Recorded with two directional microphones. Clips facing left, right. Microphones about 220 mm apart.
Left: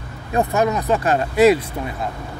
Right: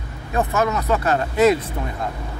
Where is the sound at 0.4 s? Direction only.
15° left (ahead or behind).